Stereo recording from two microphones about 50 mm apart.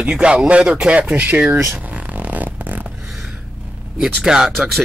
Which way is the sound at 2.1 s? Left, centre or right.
Right.